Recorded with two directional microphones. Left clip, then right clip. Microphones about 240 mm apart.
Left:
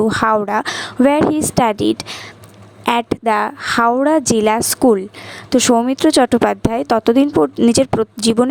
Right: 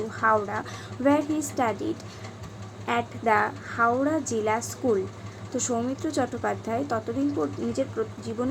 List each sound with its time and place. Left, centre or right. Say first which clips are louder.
0.1 s a woman's voice: left 9 dB; left